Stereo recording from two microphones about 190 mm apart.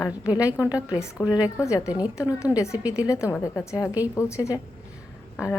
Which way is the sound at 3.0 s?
15° left (ahead or behind).